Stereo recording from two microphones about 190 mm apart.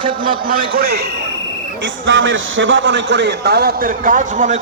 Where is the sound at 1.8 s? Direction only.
90° right.